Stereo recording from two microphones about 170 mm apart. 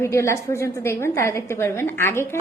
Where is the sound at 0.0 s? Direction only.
15° left (ahead or behind).